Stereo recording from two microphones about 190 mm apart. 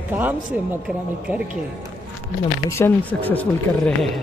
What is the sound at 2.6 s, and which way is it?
Speech, 15° left (ahead or behind).